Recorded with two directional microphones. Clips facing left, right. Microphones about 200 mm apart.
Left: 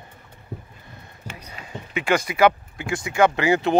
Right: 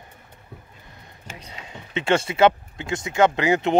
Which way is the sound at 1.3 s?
25° right (ahead or behind).